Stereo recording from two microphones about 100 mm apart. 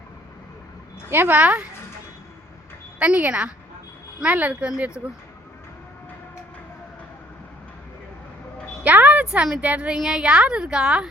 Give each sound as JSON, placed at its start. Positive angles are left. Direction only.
{"t": 1.1, "sound": "a woman's voice", "side_deg": -20}
{"t": 3.0, "sound": "a woman's voice", "side_deg": -15}
{"t": 8.8, "sound": "a woman's voice", "side_deg": -15}